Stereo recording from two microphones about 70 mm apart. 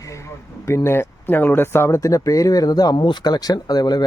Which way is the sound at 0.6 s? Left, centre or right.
Left.